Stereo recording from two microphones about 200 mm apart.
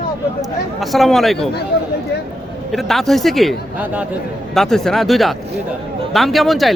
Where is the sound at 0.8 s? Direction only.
Centre (ahead or behind).